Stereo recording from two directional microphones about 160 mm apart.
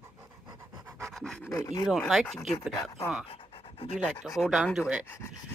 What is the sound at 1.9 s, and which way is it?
Speech, centre (ahead or behind).